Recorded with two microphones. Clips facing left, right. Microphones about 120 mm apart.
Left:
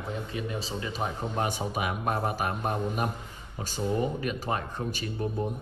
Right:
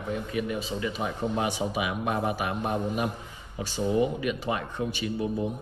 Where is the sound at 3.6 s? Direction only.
40° left (ahead or behind).